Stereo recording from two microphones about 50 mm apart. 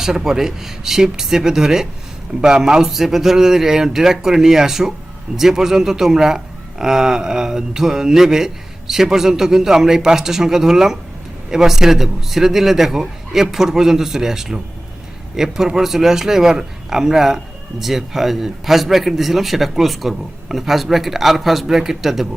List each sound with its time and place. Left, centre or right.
0.0 s a man's voice: centre